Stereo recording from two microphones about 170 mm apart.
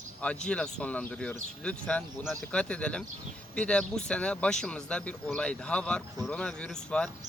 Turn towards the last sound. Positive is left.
turn(degrees=5)  # may be behind; listen again after turning